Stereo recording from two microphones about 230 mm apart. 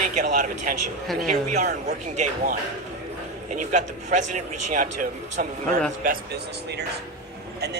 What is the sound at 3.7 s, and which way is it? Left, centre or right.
Speech, right.